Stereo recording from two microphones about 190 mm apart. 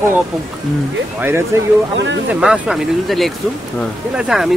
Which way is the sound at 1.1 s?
10° right (ahead or behind).